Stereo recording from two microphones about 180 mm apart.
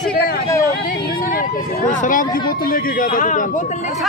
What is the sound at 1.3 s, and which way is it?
Speech, 50° left (ahead or behind).